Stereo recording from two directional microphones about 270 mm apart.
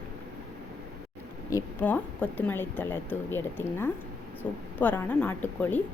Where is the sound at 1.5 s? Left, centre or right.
Centre.